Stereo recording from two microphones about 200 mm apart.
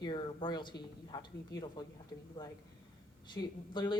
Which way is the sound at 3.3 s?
20° left (ahead or behind).